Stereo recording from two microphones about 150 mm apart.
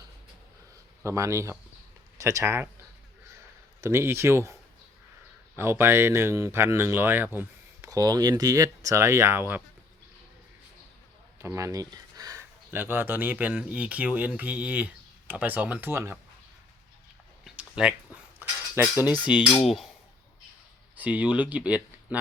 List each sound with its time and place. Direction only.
1.0 s speech: 20° right (ahead or behind)
3.8 s speech: 15° right (ahead or behind)
5.5 s speech: 15° right (ahead or behind)
11.3 s speech: 20° right (ahead or behind)
17.4 s a sound: 5° right (ahead or behind)
18.8 s speech: 15° right (ahead or behind)
20.9 s speech: 10° right (ahead or behind)